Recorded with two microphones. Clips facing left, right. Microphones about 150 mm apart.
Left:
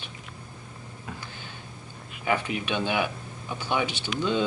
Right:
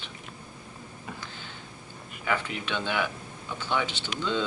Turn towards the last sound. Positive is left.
turn(degrees=15)  # may be behind; listen again after turning